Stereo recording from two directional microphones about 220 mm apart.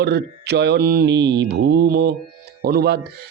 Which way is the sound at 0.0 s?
50° right (ahead or behind).